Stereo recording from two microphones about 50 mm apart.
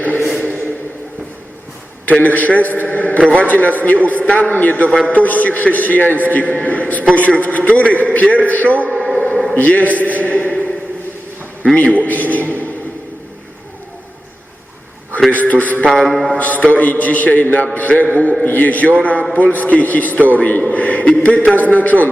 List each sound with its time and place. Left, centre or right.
2.0 s a man's voice: left
9.1 s a sound: left
9.6 s a man's voice: left
11.8 s a man's voice: left
15.3 s a man's voice: left
15.8 s mantra: centre
16.4 s a man's voice: left